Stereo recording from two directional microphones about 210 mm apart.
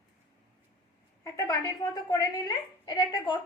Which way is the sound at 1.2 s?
15° left (ahead or behind).